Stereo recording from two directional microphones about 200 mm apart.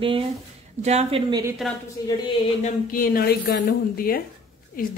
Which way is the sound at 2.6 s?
45° left (ahead or behind).